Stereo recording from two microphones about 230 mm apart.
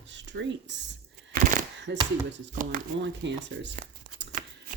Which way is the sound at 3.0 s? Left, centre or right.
Right.